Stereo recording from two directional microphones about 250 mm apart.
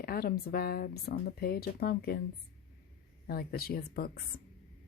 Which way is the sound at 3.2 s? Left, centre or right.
Left.